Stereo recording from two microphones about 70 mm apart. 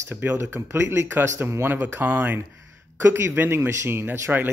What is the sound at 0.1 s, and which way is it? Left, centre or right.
A man's voice, right.